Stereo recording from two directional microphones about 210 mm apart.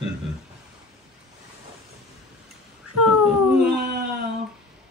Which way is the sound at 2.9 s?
5° right (ahead or behind).